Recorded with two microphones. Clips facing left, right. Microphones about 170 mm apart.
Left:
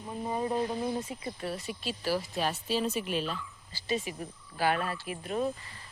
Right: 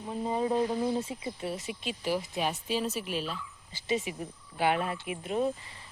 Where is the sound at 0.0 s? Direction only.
20° right (ahead or behind).